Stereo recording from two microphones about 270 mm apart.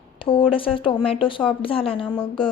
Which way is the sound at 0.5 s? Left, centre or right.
Centre.